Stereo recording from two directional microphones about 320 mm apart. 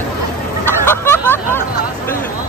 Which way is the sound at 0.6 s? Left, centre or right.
Centre.